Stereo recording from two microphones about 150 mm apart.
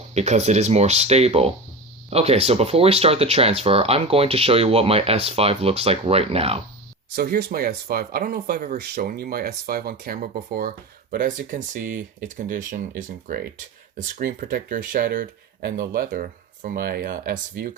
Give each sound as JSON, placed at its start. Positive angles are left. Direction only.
{"t": 0.1, "sound": "speech", "side_deg": -45}
{"t": 7.2, "sound": "speech", "side_deg": -90}
{"t": 10.2, "sound": "speech", "side_deg": -65}